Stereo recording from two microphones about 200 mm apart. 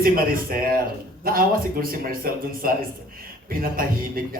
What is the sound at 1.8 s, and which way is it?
Speech, 45° right (ahead or behind).